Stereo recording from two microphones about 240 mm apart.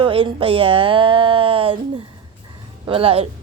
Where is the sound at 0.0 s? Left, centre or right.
Right.